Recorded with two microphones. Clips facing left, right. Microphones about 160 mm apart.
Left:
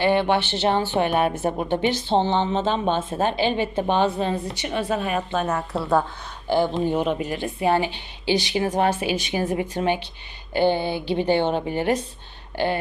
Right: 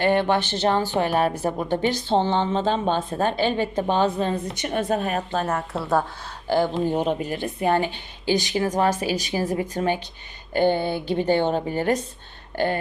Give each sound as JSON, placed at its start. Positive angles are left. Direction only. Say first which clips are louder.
{"t": 0.0, "sound": "a woman's voice", "louder": "even", "side_deg": -45}
{"t": 5.7, "sound": "speech", "louder": "left 2 dB", "side_deg": 0}
{"t": 6.5, "sound": "a woman's voice", "louder": "even", "side_deg": -45}
{"t": 12.5, "sound": "a sound", "louder": "even", "side_deg": -45}